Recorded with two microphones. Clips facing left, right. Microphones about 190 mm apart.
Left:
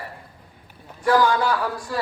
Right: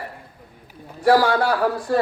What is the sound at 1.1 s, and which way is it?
Speech, 60° right (ahead or behind).